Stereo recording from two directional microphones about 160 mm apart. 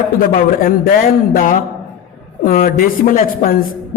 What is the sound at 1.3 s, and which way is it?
A woman's voice, 60° left (ahead or behind).